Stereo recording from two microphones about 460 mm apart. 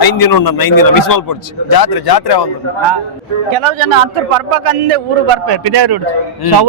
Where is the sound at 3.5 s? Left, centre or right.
Right.